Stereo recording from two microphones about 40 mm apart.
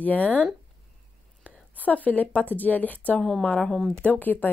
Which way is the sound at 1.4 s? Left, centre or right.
Left.